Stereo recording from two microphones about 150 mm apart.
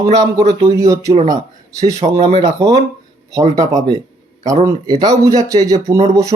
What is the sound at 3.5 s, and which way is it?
Speech, 25° right (ahead or behind).